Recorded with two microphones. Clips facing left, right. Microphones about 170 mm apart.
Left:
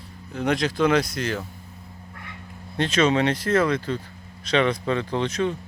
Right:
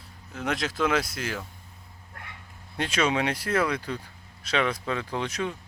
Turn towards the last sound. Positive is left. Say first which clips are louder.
# left 6 dB
turn(degrees=-10)  # may be behind; listen again after turning